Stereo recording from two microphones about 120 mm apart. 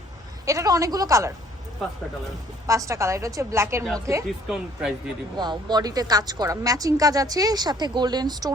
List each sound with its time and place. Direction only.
0.4 s a woman's voice: 30° right (ahead or behind)
2.6 s a woman's voice: 25° right (ahead or behind)
4.3 s speech: 5° right (ahead or behind)
5.4 s speech: 35° right (ahead or behind)